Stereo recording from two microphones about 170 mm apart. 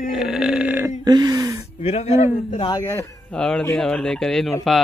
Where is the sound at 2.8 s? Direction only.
15° left (ahead or behind).